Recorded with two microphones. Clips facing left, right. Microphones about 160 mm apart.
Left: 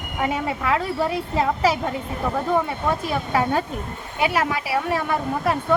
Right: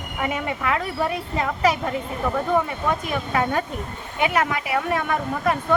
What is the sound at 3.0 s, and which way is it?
Speech, 30° left (ahead or behind).